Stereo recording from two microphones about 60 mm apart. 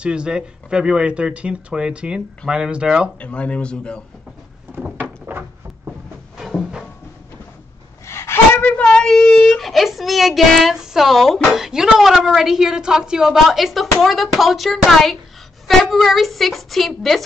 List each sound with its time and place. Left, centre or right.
0.0 s speech: centre
3.2 s speech: left
4.8 s a sound: right
5.3 s cupboard open or close: right
8.1 s gasp: left
8.6 s a woman's voice: left; by 17.2 s centre